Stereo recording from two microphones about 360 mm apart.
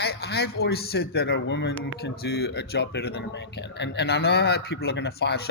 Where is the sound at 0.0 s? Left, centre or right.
Left.